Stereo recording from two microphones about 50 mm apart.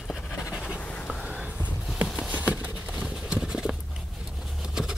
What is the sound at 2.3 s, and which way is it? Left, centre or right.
Clip-clop, right.